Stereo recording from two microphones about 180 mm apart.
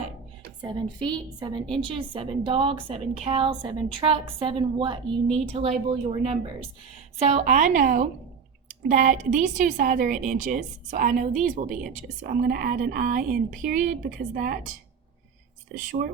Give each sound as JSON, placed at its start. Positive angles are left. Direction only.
{"t": 0.6, "sound": "a woman's voice", "side_deg": -25}
{"t": 15.7, "sound": "a woman's voice", "side_deg": -45}